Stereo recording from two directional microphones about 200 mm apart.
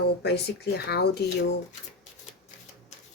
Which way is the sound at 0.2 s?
55° left (ahead or behind).